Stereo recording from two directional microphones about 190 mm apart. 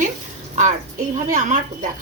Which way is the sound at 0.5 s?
40° right (ahead or behind).